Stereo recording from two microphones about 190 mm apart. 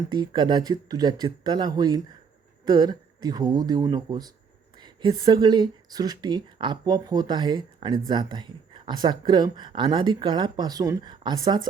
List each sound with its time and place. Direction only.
0.1 s speech: 25° right (ahead or behind)